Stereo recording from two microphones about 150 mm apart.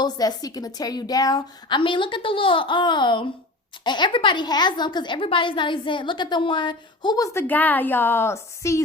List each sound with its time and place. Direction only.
0.0 s a woman's voice: 25° left (ahead or behind)
7.3 s a woman's voice: 10° left (ahead or behind)